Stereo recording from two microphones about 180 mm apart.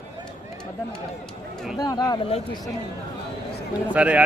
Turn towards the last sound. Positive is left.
turn(degrees=-5)  # may be behind; listen again after turning